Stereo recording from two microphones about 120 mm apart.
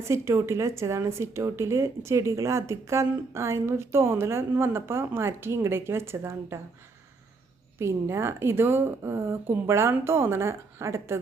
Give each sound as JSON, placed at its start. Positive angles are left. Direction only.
{"t": 0.0, "sound": "a woman's voice", "side_deg": -20}
{"t": 7.8, "sound": "a woman's voice", "side_deg": -20}